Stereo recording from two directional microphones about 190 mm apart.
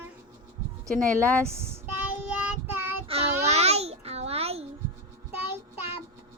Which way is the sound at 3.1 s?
35° right (ahead or behind).